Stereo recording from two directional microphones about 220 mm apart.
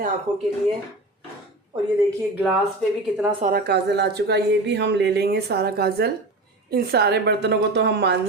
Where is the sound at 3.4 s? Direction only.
45° right (ahead or behind).